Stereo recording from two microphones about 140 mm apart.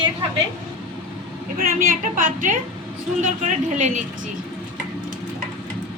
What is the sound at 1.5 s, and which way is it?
A woman's voice, 85° right.